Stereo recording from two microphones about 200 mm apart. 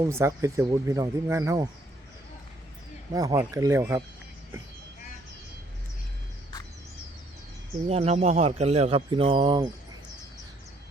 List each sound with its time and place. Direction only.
0.0 s speech: 15° right (ahead or behind)
3.1 s speech: 20° right (ahead or behind)
7.9 s speech: 30° right (ahead or behind)